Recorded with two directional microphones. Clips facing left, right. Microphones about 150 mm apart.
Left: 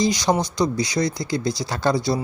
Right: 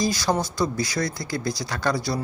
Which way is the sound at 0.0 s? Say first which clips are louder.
Left 3 dB; 20° left (ahead or behind).